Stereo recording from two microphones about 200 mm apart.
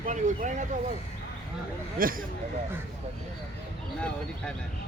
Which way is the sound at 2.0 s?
45° right (ahead or behind).